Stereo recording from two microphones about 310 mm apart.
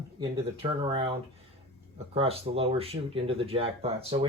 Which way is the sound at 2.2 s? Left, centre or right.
Centre.